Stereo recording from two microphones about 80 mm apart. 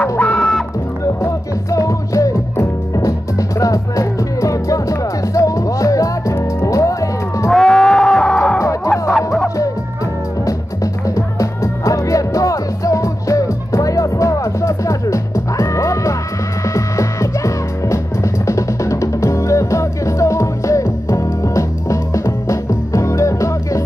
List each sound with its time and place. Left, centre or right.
0.2 s music: centre
1.2 s music: left
7.5 s music: centre
8.5 s music: left
9.1 s music: centre
10.4 s music: left